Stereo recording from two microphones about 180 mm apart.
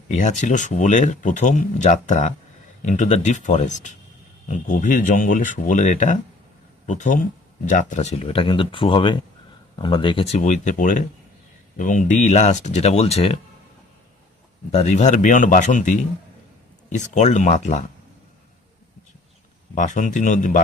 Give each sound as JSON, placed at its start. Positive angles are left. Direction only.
{"t": 0.1, "sound": "speech", "side_deg": 40}
{"t": 14.7, "sound": "speech", "side_deg": 35}
{"t": 19.7, "sound": "speech", "side_deg": 45}